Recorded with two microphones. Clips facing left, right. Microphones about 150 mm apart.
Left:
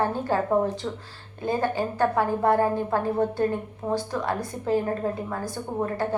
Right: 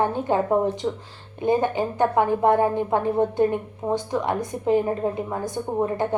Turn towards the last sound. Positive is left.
turn(degrees=-20)  # may be behind; listen again after turning